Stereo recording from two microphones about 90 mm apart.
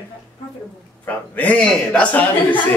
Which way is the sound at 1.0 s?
15° left (ahead or behind).